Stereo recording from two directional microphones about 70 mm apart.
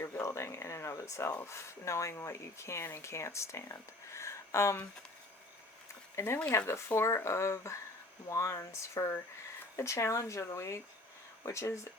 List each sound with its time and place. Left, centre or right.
0.0 s speech: left
6.1 s speech: left